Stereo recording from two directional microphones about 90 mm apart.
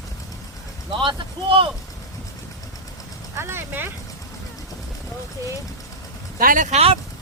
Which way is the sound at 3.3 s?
25° right (ahead or behind).